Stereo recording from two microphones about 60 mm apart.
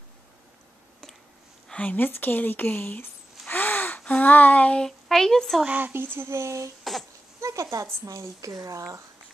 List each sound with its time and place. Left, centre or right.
1.7 s speech: left
2.0 s speech: left
3.4 s gasp: left
4.2 s child singing: left
4.8 s speech: centre
5.7 s speech: right
5.9 s speech: right
6.8 s a sound: centre
7.3 s a sound: right
7.7 s speech: right